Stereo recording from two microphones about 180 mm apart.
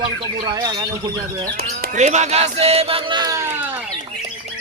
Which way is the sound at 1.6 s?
55° right (ahead or behind).